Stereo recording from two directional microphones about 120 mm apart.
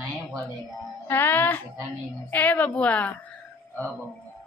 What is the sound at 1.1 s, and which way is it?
A woman's voice, 15° left (ahead or behind).